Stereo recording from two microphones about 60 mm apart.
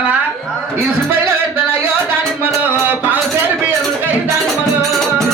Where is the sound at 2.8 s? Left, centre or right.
Right.